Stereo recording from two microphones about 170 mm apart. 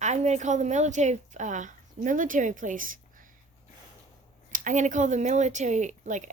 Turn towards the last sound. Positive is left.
turn(degrees=-45)  # may be behind; listen again after turning